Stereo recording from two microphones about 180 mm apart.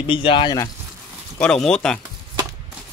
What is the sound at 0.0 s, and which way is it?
Speech, 30° left (ahead or behind).